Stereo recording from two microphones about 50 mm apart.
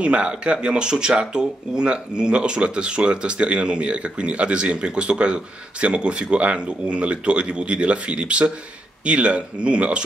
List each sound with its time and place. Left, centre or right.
0.0 s speech: right